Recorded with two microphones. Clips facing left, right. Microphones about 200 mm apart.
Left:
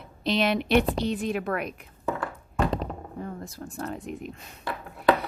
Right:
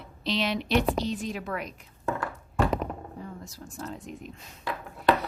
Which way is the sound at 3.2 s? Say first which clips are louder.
Left 5 dB; 55° left (ahead or behind).